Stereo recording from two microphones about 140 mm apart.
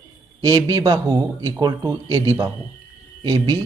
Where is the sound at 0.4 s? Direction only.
30° right (ahead or behind).